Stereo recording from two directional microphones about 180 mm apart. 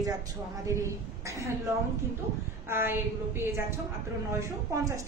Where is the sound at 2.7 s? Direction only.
15° right (ahead or behind).